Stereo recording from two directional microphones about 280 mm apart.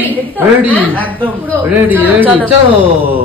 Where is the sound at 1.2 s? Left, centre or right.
Centre.